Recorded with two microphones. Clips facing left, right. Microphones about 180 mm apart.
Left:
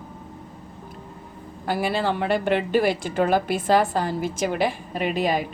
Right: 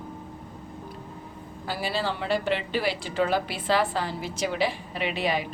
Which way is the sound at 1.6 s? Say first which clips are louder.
Left 5 dB; 55° left (ahead or behind).